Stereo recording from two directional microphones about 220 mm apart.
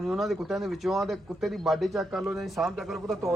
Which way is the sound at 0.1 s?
Centre (ahead or behind).